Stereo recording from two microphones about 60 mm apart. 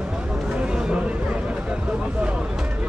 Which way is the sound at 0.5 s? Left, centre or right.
Centre.